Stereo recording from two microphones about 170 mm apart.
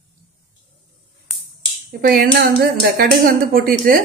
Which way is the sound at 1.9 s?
60° right (ahead or behind).